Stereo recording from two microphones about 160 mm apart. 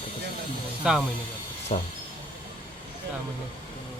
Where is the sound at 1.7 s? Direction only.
40° left (ahead or behind).